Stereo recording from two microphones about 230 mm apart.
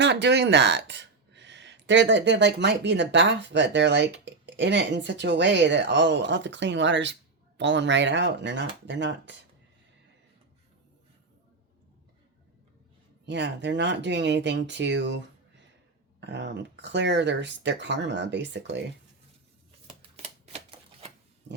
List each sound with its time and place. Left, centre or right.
0.0 s speech: right
13.2 s speech: right
16.2 s speech: right
20.0 s typewriter: right